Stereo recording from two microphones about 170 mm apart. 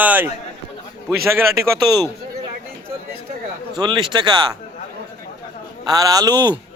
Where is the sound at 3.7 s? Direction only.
25° right (ahead or behind).